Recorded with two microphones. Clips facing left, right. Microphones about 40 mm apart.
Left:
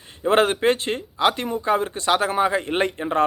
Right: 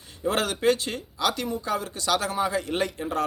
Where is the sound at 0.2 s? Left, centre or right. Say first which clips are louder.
Left 7 dB; left.